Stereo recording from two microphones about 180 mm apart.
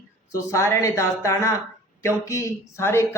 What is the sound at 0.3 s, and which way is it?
Speech, 15° left (ahead or behind).